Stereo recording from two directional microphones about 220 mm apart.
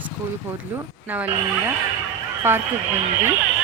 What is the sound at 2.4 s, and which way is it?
Speech, 10° right (ahead or behind).